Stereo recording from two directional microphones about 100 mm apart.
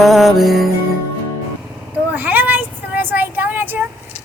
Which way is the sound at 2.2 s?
20° right (ahead or behind).